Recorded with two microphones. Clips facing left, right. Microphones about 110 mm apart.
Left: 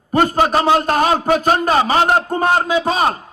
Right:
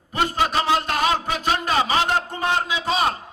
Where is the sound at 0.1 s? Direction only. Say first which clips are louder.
Left 7 dB; 45° left (ahead or behind).